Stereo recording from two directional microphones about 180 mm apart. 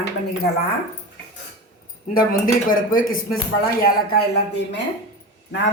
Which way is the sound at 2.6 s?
50° left (ahead or behind).